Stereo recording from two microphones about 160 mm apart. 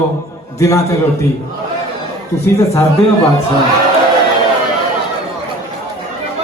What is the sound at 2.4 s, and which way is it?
Speech, 20° left (ahead or behind).